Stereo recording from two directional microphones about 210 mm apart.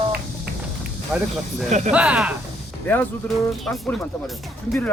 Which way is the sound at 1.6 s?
35° right (ahead or behind).